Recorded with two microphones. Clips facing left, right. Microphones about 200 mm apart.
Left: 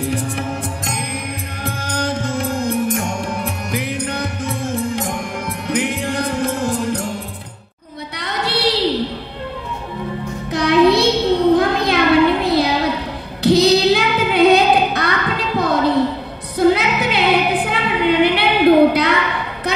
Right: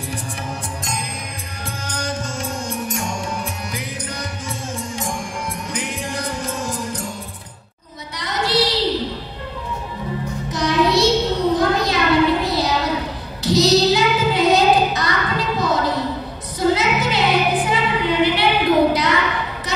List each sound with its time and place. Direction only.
0.0 s music: 60° left (ahead or behind)
8.2 s a sound: 60° left (ahead or behind)
10.5 s music: 60° left (ahead or behind)
11.5 s a sound: 60° left (ahead or behind)
13.4 s child singing: 60° left (ahead or behind)
16.5 s music: 60° left (ahead or behind)